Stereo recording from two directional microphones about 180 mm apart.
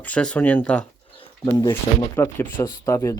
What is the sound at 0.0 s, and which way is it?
Speech, 5° left (ahead or behind).